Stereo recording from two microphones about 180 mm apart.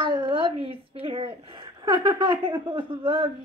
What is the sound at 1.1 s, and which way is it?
A woman's voice, 30° right (ahead or behind).